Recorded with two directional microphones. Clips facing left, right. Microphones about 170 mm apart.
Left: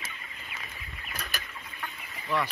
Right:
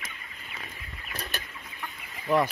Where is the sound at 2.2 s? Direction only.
45° right (ahead or behind).